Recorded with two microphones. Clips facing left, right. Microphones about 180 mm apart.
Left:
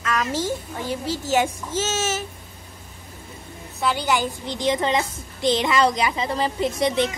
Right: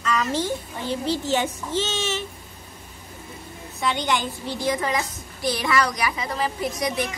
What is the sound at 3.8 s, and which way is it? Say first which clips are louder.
A woman's voice: left 2 dB; 5° left (ahead or behind).